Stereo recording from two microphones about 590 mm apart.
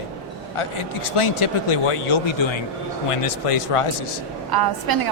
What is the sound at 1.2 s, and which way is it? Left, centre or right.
Speech, left.